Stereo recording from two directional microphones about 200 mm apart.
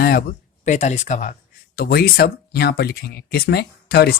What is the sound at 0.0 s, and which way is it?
Speech, 50° left (ahead or behind).